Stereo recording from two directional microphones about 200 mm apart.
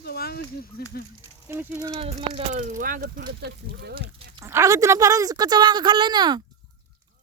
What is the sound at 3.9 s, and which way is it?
Sheep, 25° right (ahead or behind).